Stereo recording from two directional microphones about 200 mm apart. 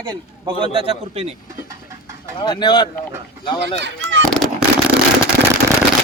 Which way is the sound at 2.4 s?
20° left (ahead or behind).